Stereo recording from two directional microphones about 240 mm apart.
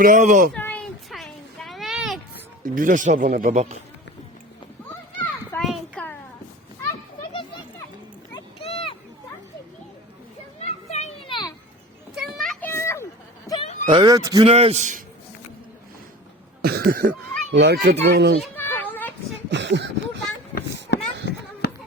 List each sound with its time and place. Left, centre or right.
0.0 s speech: right
0.5 s a sound: centre
2.7 s speech: right
5.2 s children playing: centre
8.3 s a sound: left
10.6 s children playing: left
12.1 s children playing: centre
13.5 s a sound: left
13.8 s a man's voice: centre
16.6 s a child's voice: right
18.5 s children playing: centre
19.5 s speech: right
20.9 s a sound: left